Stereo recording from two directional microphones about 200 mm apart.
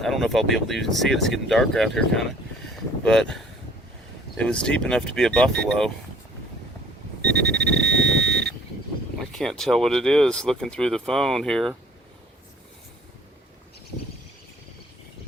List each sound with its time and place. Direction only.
0.0 s speech: centre (ahead or behind)
7.3 s a sound: 60° right (ahead or behind)
9.4 s speech: centre (ahead or behind)